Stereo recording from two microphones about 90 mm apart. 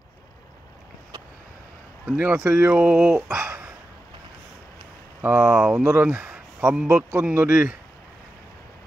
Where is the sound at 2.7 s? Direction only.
10° right (ahead or behind).